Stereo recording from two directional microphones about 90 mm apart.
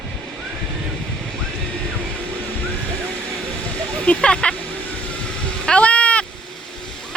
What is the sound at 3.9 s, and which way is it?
Speech, 10° left (ahead or behind).